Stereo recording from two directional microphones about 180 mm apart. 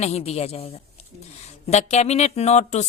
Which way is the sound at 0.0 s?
35° left (ahead or behind).